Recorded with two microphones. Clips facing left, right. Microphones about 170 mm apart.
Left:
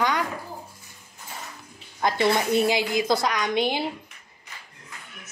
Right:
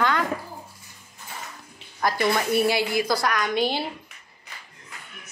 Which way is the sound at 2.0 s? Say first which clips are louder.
Left 1 dB; 20° left (ahead or behind).